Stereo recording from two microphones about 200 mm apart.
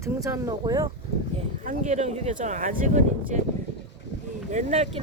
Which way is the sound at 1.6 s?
35° right (ahead or behind).